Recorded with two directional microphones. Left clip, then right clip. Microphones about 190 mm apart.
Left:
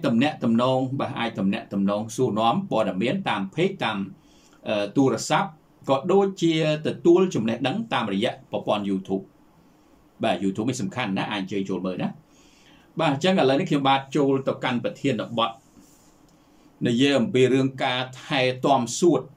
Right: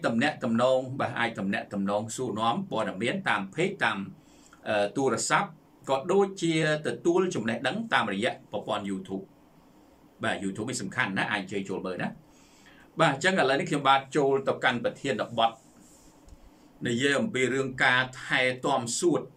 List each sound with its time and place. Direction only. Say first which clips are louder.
0.0 s speech: left 4 dB; 10° left (ahead or behind)
10.2 s speech: left 6 dB; 15° left (ahead or behind)
16.8 s speech: left 5 dB; 15° left (ahead or behind)